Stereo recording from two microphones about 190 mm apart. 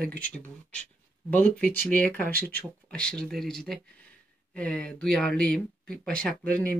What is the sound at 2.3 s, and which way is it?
Speech, 50° right (ahead or behind).